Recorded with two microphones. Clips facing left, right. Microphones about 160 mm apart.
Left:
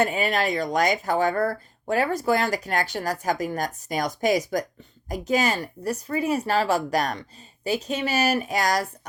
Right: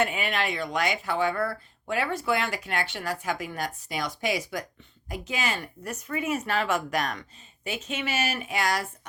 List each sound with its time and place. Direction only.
0.0 s speech: 40° left (ahead or behind)